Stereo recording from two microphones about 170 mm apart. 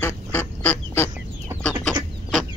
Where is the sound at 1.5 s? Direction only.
15° right (ahead or behind).